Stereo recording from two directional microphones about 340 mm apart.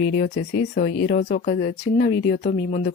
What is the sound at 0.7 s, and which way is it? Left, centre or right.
Speech, left.